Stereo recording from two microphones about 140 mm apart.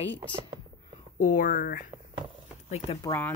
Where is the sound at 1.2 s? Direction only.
80° left.